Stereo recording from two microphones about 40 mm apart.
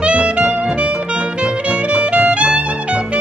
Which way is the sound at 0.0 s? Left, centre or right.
Right.